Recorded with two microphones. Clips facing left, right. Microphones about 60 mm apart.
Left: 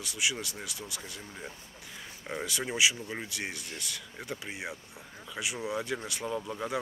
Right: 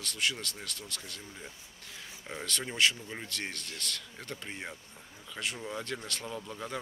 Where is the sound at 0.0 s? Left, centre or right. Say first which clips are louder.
Left 1 dB; centre.